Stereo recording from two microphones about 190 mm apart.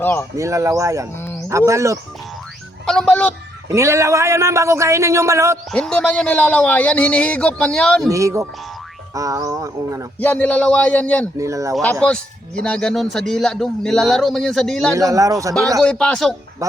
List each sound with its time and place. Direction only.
0.0 s a man's voice: 15° left (ahead or behind)
0.3 s a man's voice: 15° right (ahead or behind)
2.8 s speech: 5° left (ahead or behind)
3.7 s a man's voice: 15° right (ahead or behind)
5.7 s a man's voice: 5° left (ahead or behind)
8.1 s a man's voice: 15° right (ahead or behind)
10.2 s a man's voice: 10° left (ahead or behind)
11.3 s a man's voice: 15° right (ahead or behind)
11.7 s a man's voice: 5° left (ahead or behind)
14.9 s a man's voice: 15° right (ahead or behind)
15.8 s a man's voice: 5° left (ahead or behind)